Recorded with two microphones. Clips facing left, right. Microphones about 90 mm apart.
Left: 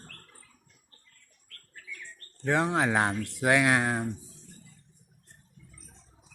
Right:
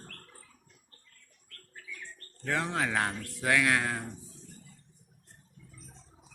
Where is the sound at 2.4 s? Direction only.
20° left (ahead or behind).